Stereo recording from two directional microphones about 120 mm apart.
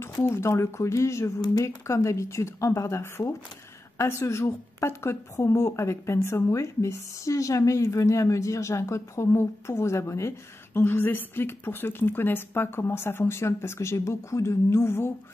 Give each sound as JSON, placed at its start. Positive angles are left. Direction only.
{"t": 0.0, "sound": "a woman's voice", "side_deg": 20}